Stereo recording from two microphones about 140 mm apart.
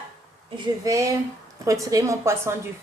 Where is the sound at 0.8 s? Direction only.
20° right (ahead or behind).